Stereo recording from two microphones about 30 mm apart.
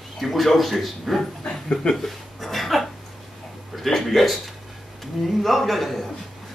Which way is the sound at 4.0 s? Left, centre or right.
Centre.